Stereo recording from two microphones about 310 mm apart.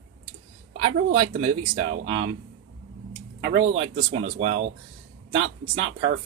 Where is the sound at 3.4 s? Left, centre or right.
Right.